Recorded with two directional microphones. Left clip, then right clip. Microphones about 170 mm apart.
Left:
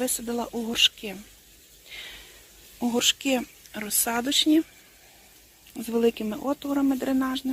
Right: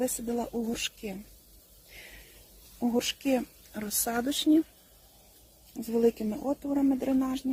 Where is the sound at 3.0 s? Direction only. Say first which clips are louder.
Left 6 dB; centre (ahead or behind).